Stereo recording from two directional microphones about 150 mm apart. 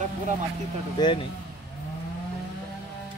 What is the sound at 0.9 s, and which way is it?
Speech, 30° left (ahead or behind).